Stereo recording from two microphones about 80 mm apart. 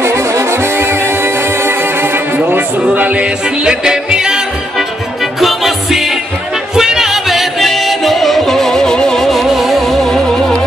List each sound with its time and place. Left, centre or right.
0.0 s music: right; by 10.2 s centre